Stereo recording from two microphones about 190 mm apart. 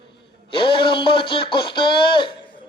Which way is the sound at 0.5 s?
25° left (ahead or behind).